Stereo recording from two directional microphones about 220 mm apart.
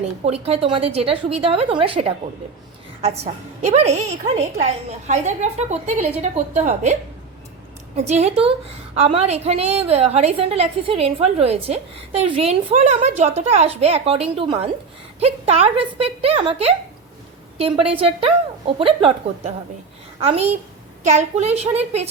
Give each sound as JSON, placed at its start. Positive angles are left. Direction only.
{"t": 0.3, "sound": "a woman's voice", "side_deg": -25}
{"t": 7.9, "sound": "a woman's voice", "side_deg": -30}